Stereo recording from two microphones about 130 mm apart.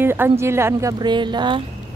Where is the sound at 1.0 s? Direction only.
35° right (ahead or behind).